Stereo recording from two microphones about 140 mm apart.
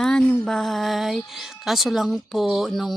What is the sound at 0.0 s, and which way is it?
Speech, 5° left (ahead or behind).